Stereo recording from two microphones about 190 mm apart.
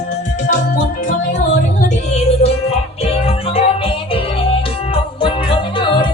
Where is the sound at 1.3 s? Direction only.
40° left (ahead or behind).